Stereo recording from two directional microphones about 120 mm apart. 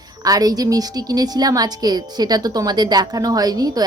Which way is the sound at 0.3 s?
30° right (ahead or behind).